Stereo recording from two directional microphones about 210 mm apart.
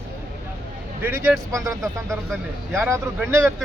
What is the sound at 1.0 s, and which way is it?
Speech, 10° right (ahead or behind).